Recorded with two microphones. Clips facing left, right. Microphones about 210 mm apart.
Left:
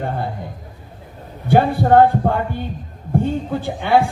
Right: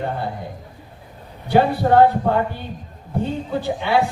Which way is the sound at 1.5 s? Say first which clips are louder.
Left 2 dB; 50° left (ahead or behind).